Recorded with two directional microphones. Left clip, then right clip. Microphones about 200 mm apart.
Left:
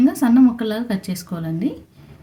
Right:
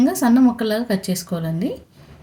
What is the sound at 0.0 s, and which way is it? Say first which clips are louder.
A woman's voice: left 1 dB; 15° right (ahead or behind).